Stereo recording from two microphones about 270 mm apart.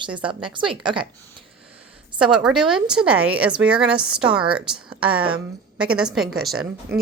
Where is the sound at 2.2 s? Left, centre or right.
Centre.